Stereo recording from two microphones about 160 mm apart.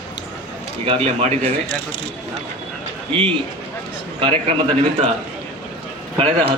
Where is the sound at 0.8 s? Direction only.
35° right (ahead or behind).